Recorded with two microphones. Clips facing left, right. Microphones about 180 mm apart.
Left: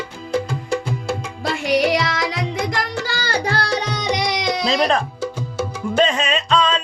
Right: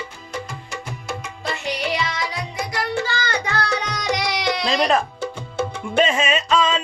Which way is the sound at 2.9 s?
40° left (ahead or behind).